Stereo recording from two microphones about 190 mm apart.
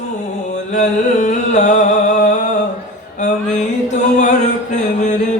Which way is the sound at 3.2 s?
40° left (ahead or behind).